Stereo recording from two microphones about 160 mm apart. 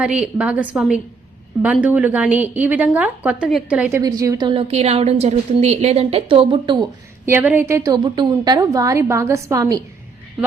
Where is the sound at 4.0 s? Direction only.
25° right (ahead or behind).